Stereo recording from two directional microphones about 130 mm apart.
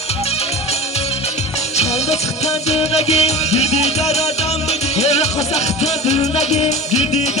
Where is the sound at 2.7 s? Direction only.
55° left (ahead or behind).